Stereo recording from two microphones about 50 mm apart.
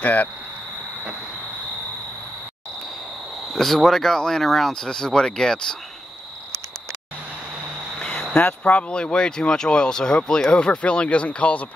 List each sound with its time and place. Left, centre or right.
0.0 s speech: left
3.5 s speech: centre
8.0 s cricket: centre
8.4 s speech: left